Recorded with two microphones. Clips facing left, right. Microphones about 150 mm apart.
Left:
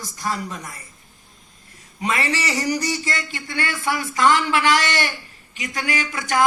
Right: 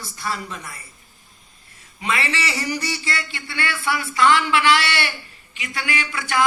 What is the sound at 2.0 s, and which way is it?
A man's voice, 40° left (ahead or behind).